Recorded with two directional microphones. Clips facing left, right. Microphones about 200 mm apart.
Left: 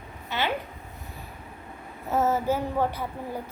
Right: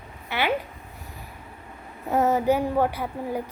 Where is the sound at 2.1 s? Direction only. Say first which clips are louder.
Right 3 dB; 15° right (ahead or behind).